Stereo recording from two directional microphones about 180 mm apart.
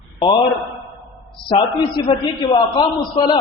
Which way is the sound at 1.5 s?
25° left (ahead or behind).